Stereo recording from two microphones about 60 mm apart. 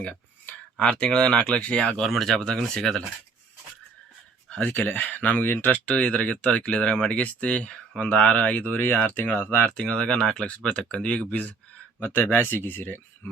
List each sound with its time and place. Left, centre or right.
0.8 s speech: centre
2.0 s speech: centre
4.4 s speech: left
5.9 s speech: centre
8.8 s speech: left
9.8 s speech: centre
11.9 s speech: left